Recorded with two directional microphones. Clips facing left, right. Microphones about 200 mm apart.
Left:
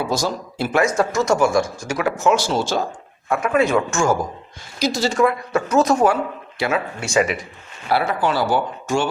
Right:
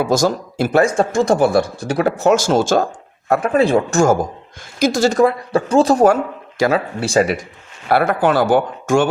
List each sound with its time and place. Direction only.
0.0 s speech: 45° right (ahead or behind)
5.2 s speech: 30° right (ahead or behind)
7.9 s speech: 55° right (ahead or behind)